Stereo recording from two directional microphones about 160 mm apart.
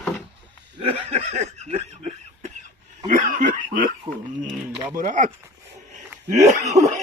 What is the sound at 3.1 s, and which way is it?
Speech, 55° right (ahead or behind).